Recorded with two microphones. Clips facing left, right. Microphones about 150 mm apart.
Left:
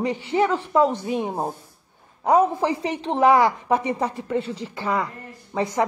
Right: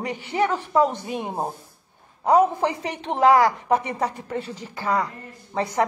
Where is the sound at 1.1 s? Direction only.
5° right (ahead or behind).